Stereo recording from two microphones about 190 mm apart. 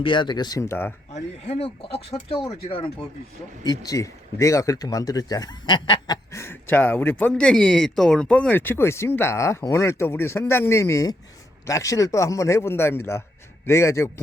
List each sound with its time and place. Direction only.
0.0 s speech: 25° left (ahead or behind)
1.1 s speech: 35° left (ahead or behind); by 14.1 s 15° left (ahead or behind)